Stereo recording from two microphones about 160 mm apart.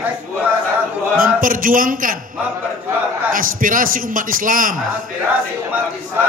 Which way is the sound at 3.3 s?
55° right (ahead or behind).